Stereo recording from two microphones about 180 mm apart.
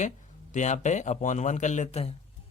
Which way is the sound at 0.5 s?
40° left (ahead or behind).